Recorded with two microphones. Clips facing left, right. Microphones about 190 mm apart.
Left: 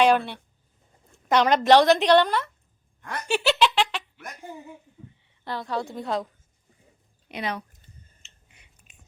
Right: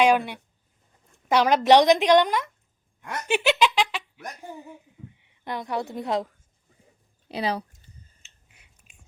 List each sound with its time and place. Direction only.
0.0 s a woman's voice: 10° right (ahead or behind)
5.1 s a woman's voice: 15° right (ahead or behind)
7.3 s speech: 30° right (ahead or behind)
8.4 s a sound: 5° right (ahead or behind)